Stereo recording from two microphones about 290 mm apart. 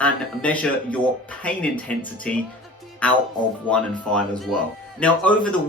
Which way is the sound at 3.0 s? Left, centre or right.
Centre.